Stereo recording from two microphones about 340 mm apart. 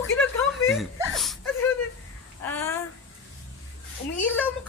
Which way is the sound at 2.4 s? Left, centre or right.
Centre.